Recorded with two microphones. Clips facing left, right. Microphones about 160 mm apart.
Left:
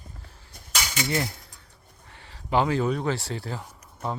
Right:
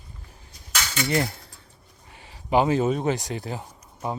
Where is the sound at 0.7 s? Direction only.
15° left (ahead or behind).